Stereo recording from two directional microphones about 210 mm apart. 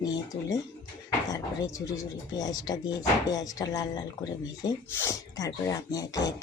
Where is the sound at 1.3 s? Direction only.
15° left (ahead or behind).